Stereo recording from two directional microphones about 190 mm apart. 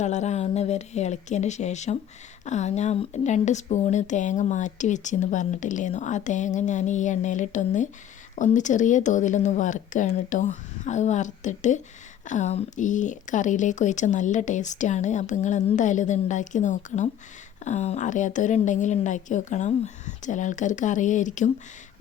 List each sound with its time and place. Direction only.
0.0 s speech: 35° left (ahead or behind)